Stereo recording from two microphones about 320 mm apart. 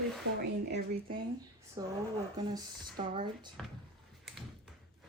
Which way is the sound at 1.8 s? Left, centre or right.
Centre.